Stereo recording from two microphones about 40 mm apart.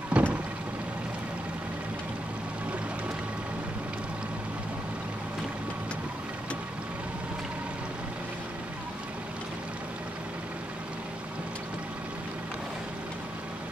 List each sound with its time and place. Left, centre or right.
0.2 s vehicle: right